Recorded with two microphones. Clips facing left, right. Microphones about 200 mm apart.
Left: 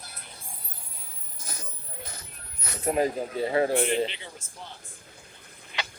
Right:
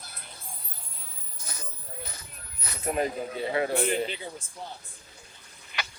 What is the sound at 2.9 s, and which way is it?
Speech, 35° left (ahead or behind).